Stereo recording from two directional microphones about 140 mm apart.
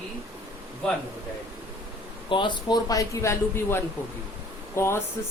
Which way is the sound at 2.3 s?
35° left (ahead or behind).